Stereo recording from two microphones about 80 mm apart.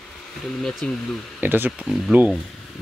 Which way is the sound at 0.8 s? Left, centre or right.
Centre.